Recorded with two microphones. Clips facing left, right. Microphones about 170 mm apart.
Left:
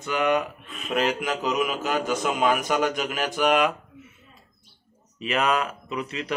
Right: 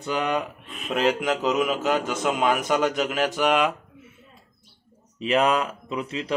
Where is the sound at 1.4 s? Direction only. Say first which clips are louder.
Right 3 dB; 25° right (ahead or behind).